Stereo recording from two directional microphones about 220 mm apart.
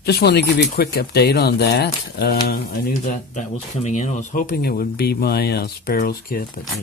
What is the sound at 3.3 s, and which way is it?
Speech, 35° left (ahead or behind).